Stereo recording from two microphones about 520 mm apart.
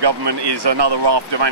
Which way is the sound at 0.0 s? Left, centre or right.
Right.